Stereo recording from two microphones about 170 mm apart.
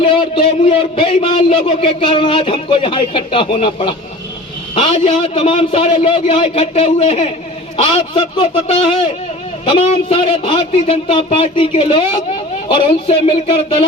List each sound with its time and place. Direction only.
0.0 s a man's voice: 30° left (ahead or behind)